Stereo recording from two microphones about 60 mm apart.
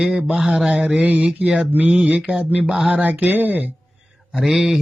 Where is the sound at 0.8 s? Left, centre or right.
Right.